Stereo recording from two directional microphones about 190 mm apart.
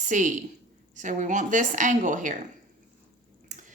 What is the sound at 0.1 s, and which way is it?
A woman's voice, 40° right (ahead or behind).